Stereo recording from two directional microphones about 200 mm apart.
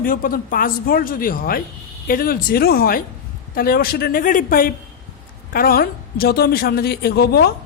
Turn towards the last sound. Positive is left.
turn(degrees=50)  # may be behind; listen again after turning